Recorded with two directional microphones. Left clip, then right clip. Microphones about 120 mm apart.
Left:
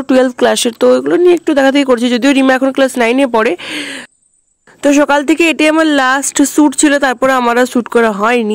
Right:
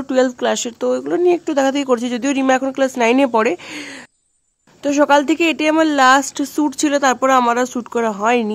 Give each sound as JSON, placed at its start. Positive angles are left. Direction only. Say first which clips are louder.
{"t": 0.1, "sound": "speech", "louder": "left 6 dB", "side_deg": 60}
{"t": 4.8, "sound": "speech", "louder": "left 4 dB", "side_deg": 55}
{"t": 5.7, "sound": "speech", "louder": "left 2 dB", "side_deg": 40}